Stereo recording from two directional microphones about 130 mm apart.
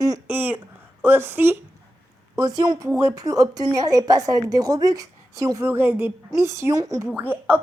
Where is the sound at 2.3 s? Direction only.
30° right (ahead or behind).